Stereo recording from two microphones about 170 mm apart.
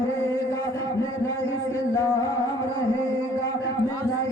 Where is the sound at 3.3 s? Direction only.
15° left (ahead or behind).